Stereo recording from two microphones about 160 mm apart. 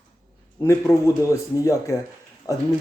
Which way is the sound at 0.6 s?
15° left (ahead or behind).